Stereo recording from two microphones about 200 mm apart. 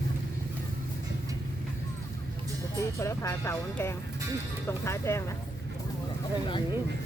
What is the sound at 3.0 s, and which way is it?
Speech, 15° left (ahead or behind).